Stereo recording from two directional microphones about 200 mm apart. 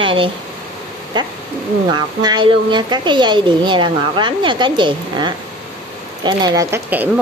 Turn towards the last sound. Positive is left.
turn(degrees=-10)  # may be behind; listen again after turning